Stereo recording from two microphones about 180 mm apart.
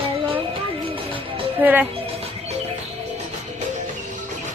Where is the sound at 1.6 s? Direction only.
10° right (ahead or behind).